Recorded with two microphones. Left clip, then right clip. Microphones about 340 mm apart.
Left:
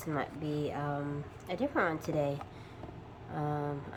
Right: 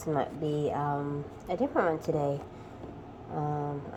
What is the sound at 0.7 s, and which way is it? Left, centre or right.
A woman's voice, centre.